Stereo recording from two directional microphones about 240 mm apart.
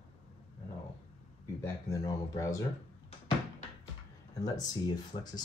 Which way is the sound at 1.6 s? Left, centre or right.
Centre.